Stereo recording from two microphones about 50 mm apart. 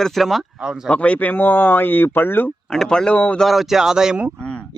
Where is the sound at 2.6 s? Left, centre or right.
Centre.